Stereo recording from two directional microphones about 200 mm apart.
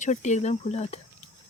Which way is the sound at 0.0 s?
35° left (ahead or behind).